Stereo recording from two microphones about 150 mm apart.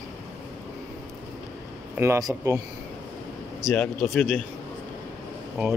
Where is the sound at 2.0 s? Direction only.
20° right (ahead or behind).